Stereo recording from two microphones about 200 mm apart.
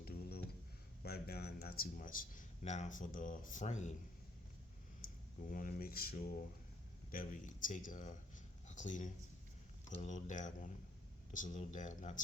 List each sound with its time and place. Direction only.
0.0 s a sound: 50° left (ahead or behind)
1.0 s a man's voice: 50° left (ahead or behind); by 3.9 s 35° left (ahead or behind)
5.0 s speech: 45° left (ahead or behind)